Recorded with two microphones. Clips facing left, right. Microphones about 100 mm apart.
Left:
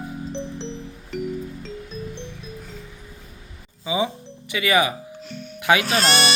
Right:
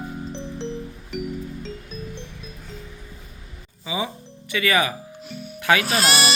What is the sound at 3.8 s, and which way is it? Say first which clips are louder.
Music: left 4 dB; 20° left (ahead or behind).